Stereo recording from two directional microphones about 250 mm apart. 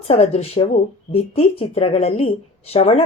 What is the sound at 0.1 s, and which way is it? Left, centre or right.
Speech, left.